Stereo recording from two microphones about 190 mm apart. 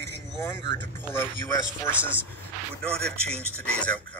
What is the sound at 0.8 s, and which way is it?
Speech, 10° left (ahead or behind).